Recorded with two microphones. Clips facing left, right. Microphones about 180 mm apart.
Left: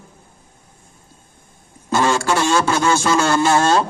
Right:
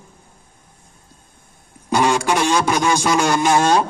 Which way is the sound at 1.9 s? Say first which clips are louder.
Even; 15° right (ahead or behind).